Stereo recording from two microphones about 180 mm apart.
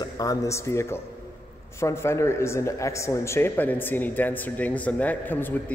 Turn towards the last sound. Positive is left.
turn(degrees=10)  # may be behind; listen again after turning